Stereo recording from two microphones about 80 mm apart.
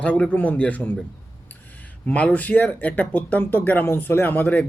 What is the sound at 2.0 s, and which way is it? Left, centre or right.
Speech, centre.